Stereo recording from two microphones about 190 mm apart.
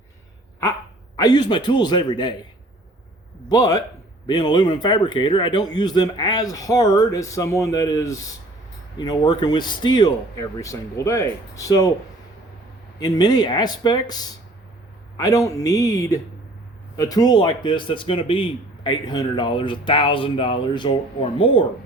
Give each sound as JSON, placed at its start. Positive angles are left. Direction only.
{"t": 1.1, "sound": "speech", "side_deg": 20}
{"t": 3.5, "sound": "speech", "side_deg": 20}
{"t": 13.0, "sound": "speech", "side_deg": 20}